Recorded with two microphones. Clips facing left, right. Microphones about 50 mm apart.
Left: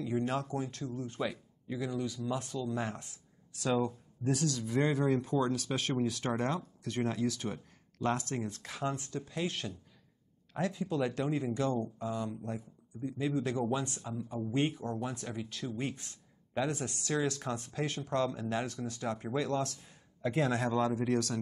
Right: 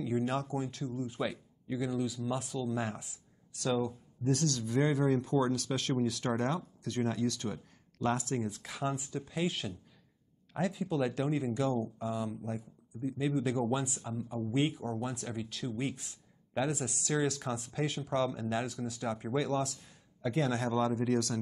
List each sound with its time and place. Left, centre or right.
0.0 s speech: centre
20.2 s speech: centre